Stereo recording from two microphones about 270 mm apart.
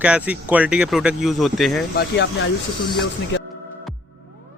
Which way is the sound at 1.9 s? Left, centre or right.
Left.